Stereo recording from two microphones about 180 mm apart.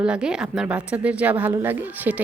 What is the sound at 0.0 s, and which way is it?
A woman's voice, 5° right (ahead or behind).